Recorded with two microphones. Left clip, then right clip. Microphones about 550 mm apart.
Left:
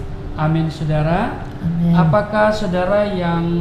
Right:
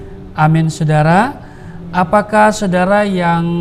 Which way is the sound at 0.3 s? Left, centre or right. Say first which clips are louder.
Right 7 dB; right.